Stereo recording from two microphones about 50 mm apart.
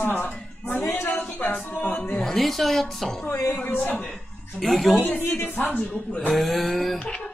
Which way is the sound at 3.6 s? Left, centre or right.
Left.